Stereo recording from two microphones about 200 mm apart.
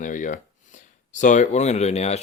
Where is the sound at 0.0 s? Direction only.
40° left (ahead or behind).